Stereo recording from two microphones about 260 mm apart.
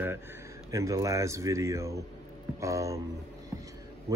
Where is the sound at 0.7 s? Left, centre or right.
Centre.